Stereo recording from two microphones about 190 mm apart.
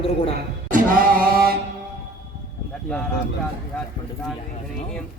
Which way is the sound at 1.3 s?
55° right (ahead or behind).